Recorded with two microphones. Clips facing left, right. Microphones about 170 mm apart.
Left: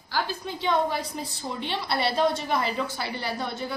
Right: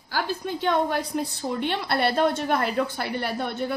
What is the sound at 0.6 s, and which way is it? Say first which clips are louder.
A woman's voice: right 1 dB; 55° right (ahead or behind).